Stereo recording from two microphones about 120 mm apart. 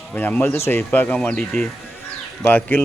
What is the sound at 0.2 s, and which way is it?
Speech, 15° left (ahead or behind).